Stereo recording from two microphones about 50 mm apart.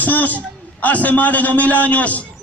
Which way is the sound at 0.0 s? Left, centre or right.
Left.